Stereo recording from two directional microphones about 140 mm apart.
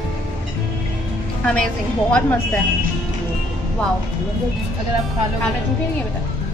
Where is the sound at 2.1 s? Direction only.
10° left (ahead or behind).